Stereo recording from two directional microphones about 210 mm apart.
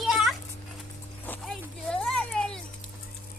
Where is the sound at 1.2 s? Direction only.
5° left (ahead or behind).